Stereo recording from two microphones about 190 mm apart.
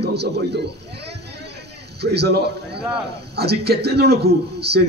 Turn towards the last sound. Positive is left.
turn(degrees=-60)  # may be behind; listen again after turning